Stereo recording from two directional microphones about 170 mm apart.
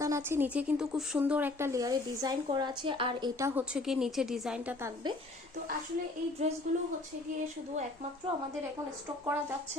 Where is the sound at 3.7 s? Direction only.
5° right (ahead or behind).